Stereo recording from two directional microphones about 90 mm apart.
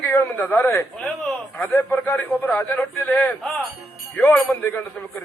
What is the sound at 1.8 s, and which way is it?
A man's voice, 20° left (ahead or behind).